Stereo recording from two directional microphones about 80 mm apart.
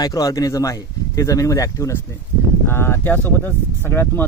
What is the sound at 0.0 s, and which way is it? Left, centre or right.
Speech, left.